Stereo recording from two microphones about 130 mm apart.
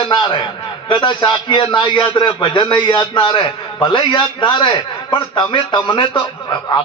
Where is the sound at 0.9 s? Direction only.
40° left (ahead or behind).